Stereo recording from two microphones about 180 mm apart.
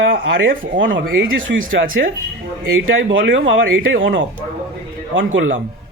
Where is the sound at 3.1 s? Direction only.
90° right.